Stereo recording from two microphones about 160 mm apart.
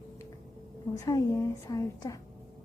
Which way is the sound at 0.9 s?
20° left (ahead or behind).